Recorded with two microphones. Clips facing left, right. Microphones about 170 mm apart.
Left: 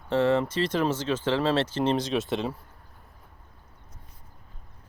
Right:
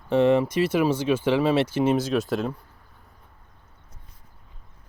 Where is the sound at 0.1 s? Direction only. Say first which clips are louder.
Right 4 dB; 15° right (ahead or behind).